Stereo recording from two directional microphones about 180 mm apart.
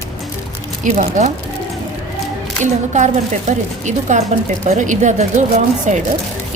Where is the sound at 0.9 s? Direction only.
40° right (ahead or behind).